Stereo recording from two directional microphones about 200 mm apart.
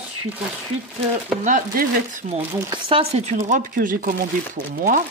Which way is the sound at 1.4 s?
45° right (ahead or behind).